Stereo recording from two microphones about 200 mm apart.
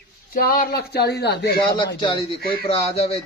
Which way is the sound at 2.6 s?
30° left (ahead or behind).